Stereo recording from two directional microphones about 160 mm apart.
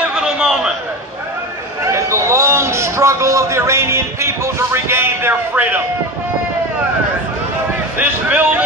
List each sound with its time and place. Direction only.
0.0 s a sound: 5° right (ahead or behind)
1.8 s a man's voice: 20° right (ahead or behind)
8.0 s speech: 10° right (ahead or behind)